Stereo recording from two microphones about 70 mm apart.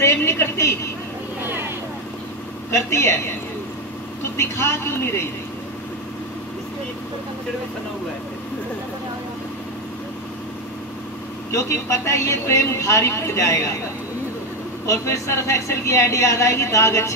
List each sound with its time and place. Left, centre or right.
0.0 s a sound: left
2.7 s speech: left
4.2 s speech: left
11.5 s speech: left
14.9 s speech: left